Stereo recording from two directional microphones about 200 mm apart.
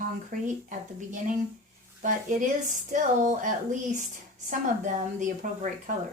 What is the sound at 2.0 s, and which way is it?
Speech, 40° right (ahead or behind).